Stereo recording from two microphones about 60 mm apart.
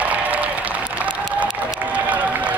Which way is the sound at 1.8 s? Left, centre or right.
Right.